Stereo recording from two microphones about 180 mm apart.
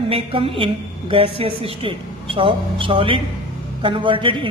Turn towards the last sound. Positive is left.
turn(degrees=-30)  # may be behind; listen again after turning